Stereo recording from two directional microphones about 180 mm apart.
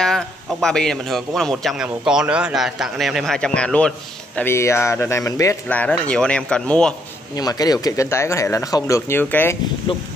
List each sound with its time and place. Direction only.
0.0 s a man's voice: centre (ahead or behind)
7.3 s speech: 20° left (ahead or behind)